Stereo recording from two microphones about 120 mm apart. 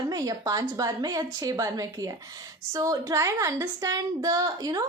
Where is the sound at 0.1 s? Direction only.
30° right (ahead or behind).